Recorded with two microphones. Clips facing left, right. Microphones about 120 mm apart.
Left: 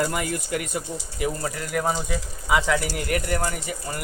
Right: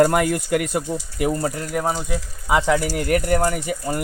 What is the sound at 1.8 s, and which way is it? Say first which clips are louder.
Speech: right 1 dB; 15° right (ahead or behind).